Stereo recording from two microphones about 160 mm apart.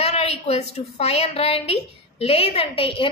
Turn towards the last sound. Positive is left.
turn(degrees=35)  # may be behind; listen again after turning